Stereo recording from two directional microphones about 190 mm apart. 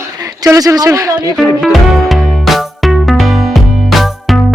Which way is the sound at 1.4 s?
Centre (ahead or behind).